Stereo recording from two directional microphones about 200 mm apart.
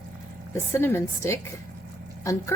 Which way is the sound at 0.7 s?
10° left (ahead or behind).